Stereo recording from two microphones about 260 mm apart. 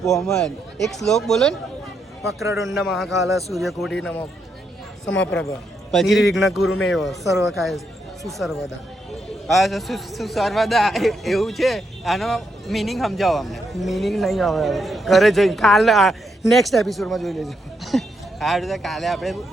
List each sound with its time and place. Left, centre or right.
0.0 s a man's voice: centre
2.2 s a man's voice: centre
2.7 s a man's voice: centre
3.2 s a man's voice: centre
3.5 s a man's voice: centre
5.9 s a man's voice: centre
6.7 s a man's voice: left
6.9 s a man's voice: centre